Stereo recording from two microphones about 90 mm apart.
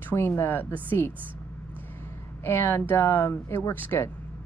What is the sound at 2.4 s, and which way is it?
Speech, 30° left (ahead or behind).